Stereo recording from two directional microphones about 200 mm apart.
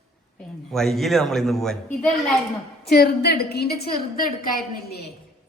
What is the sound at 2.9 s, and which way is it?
A woman's voice, 50° left (ahead or behind).